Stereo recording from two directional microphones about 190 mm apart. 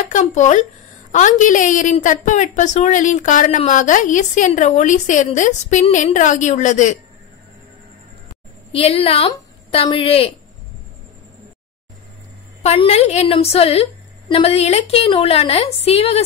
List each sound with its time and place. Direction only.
0.1 s a woman's voice: 40° left (ahead or behind)
8.7 s a woman's voice: 30° left (ahead or behind)
12.6 s a woman's voice: 30° left (ahead or behind)